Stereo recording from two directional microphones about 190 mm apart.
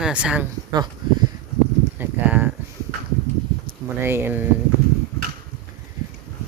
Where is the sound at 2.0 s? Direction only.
10° right (ahead or behind).